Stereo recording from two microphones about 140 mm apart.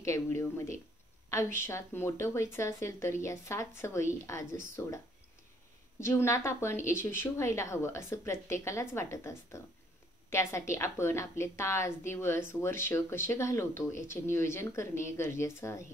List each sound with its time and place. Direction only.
0.0 s a woman's voice: 20° left (ahead or behind)